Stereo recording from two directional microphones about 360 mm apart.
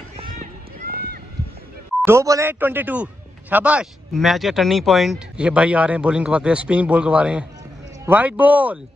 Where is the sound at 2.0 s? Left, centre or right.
Centre.